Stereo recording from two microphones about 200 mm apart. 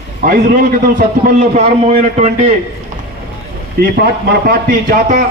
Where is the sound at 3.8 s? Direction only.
50° right (ahead or behind).